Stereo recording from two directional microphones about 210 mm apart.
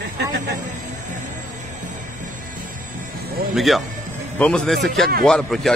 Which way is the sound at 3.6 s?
Centre (ahead or behind).